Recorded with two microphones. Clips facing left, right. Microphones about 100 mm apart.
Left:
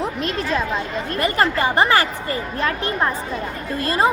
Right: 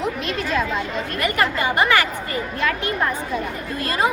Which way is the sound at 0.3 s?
35° left (ahead or behind).